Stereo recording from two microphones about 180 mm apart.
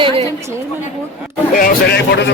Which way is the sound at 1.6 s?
60° left (ahead or behind).